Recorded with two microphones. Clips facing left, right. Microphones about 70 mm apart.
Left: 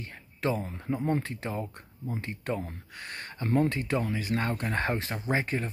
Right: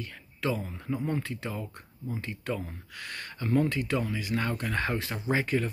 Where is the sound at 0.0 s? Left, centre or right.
Left.